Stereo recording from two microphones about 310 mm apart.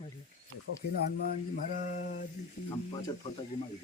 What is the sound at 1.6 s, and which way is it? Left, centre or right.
Mantra, left.